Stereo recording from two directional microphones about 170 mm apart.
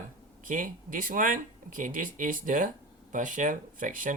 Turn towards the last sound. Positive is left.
turn(degrees=-50)  # may be behind; listen again after turning